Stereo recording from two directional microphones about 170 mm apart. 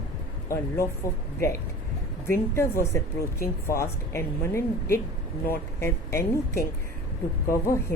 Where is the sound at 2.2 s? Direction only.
15° left (ahead or behind).